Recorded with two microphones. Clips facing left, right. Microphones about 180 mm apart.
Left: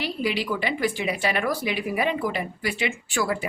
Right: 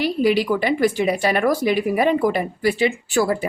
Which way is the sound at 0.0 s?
45° right (ahead or behind).